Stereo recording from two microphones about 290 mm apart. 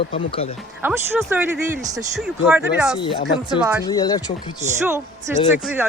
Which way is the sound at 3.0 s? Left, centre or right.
Centre.